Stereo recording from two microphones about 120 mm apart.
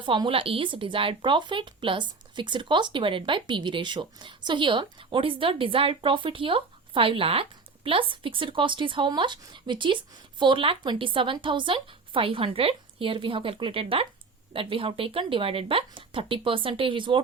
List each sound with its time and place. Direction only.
0.0 s speech: 40° right (ahead or behind)